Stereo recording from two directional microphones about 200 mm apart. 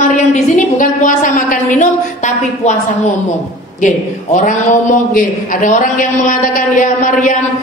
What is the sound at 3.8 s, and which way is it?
A man's voice, 40° left (ahead or behind).